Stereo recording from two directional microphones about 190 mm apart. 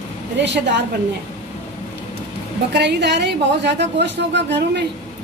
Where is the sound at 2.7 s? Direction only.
65° right (ahead or behind).